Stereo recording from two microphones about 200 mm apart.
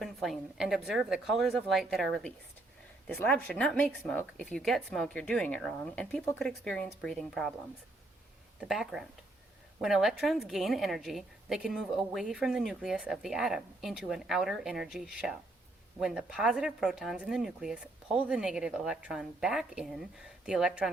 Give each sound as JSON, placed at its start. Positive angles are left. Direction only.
{"t": 0.0, "sound": "a woman's voice", "side_deg": 0}
{"t": 8.6, "sound": "a woman's voice", "side_deg": 0}